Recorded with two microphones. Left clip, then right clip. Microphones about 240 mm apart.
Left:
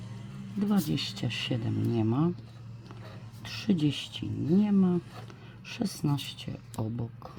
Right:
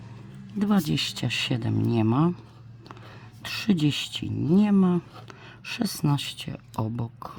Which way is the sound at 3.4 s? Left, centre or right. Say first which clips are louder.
Right 4 dB; right.